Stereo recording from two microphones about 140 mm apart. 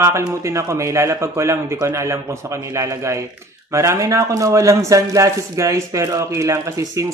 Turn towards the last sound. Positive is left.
turn(degrees=-25)  # may be behind; listen again after turning